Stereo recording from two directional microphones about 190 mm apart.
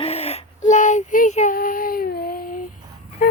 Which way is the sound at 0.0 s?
35° left (ahead or behind).